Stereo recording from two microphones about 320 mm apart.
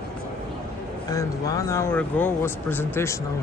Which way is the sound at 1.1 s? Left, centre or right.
Centre.